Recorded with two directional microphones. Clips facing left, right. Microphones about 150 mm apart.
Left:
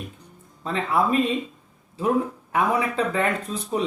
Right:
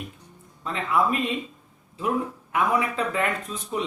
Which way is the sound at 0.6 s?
35° left (ahead or behind).